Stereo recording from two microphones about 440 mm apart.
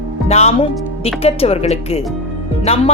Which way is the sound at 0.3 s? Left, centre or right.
Centre.